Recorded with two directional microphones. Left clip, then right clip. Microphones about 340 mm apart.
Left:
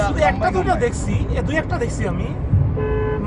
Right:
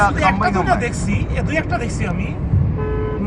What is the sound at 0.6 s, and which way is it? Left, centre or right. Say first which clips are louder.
Speech: even; left.